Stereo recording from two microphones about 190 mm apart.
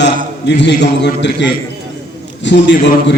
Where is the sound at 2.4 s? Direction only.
70° left (ahead or behind).